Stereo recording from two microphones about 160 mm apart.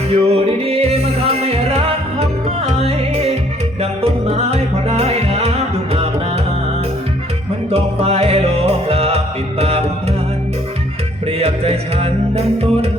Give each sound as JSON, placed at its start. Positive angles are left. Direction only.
{"t": 0.1, "sound": "music", "side_deg": -40}
{"t": 7.7, "sound": "music", "side_deg": -40}
{"t": 11.3, "sound": "music", "side_deg": -40}